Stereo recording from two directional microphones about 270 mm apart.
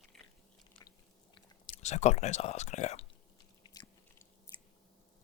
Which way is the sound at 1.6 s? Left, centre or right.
Left.